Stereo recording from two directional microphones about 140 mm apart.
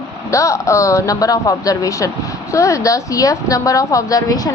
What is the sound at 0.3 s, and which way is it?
A woman's voice, 20° left (ahead or behind).